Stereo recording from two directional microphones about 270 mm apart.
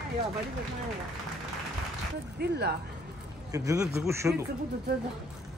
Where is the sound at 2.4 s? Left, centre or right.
Right.